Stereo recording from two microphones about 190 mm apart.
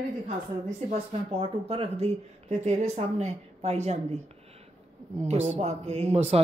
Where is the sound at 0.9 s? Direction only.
30° right (ahead or behind).